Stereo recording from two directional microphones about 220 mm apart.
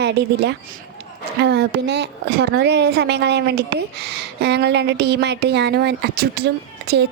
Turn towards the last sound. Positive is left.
turn(degrees=-45)  # may be behind; listen again after turning